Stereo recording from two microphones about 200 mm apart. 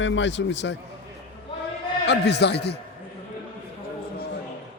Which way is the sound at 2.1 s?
60° left (ahead or behind).